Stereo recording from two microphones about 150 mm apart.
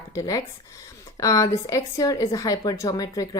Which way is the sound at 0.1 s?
20° left (ahead or behind).